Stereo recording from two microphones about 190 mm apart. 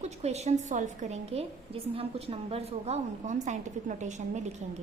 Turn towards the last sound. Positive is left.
turn(degrees=-40)  # may be behind; listen again after turning